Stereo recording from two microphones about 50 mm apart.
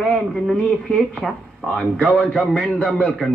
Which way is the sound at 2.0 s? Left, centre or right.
Left.